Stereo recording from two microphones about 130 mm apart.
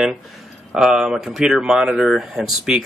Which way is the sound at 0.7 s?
5° right (ahead or behind).